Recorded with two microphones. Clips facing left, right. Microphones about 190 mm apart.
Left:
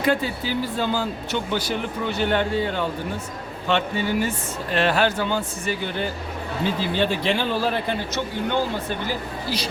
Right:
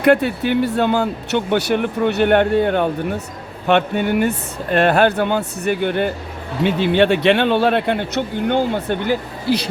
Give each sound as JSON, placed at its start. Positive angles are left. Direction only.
{"t": 0.0, "sound": "speech", "side_deg": -65}
{"t": 6.6, "sound": "speech", "side_deg": -70}